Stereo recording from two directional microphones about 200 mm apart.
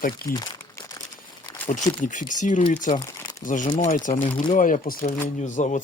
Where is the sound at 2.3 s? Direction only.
40° left (ahead or behind).